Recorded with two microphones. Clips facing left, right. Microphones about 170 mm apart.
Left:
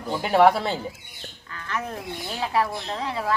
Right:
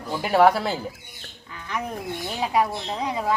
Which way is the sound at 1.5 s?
15° right (ahead or behind).